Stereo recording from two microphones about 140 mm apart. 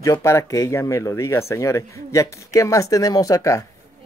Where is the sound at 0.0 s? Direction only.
20° left (ahead or behind).